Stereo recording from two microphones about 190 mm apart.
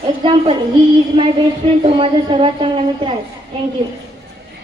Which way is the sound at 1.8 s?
30° right (ahead or behind).